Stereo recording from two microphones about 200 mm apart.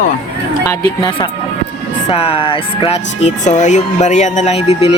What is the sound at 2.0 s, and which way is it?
Speech, 30° left (ahead or behind).